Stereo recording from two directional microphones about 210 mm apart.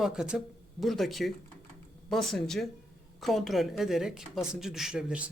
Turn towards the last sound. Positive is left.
turn(degrees=-5)  # may be behind; listen again after turning